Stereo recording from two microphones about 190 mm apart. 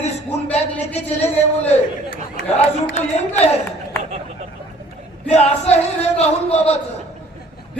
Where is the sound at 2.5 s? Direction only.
35° left (ahead or behind).